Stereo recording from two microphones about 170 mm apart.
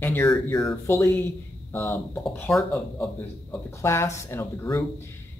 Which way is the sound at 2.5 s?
Centre (ahead or behind).